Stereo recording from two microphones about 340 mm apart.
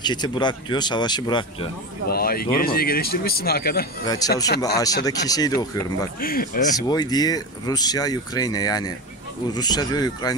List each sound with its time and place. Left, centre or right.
0.0 s speech: centre
2.0 s speech: left
4.2 s speech: centre
6.2 s speech: left
6.9 s speech: centre